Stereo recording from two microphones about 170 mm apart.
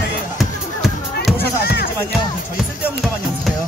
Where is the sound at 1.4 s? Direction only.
75° left (ahead or behind).